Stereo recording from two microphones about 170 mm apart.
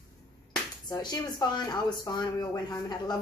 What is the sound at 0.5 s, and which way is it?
Speech, 25° left (ahead or behind).